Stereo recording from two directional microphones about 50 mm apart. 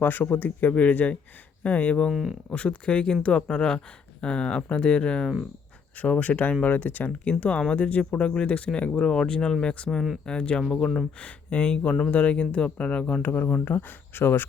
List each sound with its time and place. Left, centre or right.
0.0 s speech: left; by 5.3 s centre
6.0 s speech: left
11.2 s speech: left
13.2 s speech: left